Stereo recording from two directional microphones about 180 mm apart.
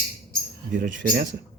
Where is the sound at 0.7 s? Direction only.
45° right (ahead or behind).